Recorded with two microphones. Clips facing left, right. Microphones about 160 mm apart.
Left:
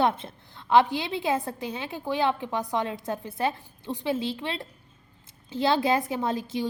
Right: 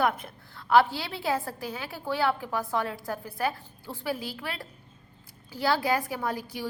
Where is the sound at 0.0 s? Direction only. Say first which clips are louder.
Left 2 dB; 25° left (ahead or behind).